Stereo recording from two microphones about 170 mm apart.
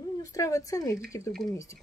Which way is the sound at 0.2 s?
20° left (ahead or behind).